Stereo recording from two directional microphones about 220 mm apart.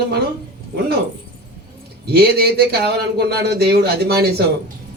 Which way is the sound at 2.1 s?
45° right (ahead or behind).